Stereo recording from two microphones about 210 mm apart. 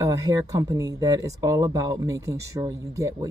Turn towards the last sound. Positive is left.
turn(degrees=-15)  # may be behind; listen again after turning